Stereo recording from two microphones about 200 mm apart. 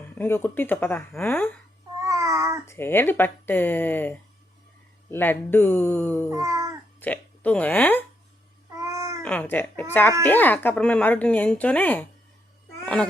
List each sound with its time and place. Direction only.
0.2 s speech: 10° left (ahead or behind)
2.0 s babbling: 15° right (ahead or behind)
2.6 s speech: 10° left (ahead or behind)
6.3 s speech: 15° right (ahead or behind)
7.0 s speech: 5° left (ahead or behind)
8.8 s babbling: 15° right (ahead or behind)
9.2 s speech: 10° left (ahead or behind)
12.8 s babbling: 5° left (ahead or behind)